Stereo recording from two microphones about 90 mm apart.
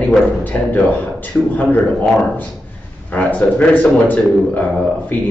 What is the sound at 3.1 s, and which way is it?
Speech, 15° left (ahead or behind).